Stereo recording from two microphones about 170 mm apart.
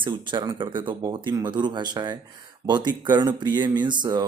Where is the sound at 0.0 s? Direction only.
25° right (ahead or behind).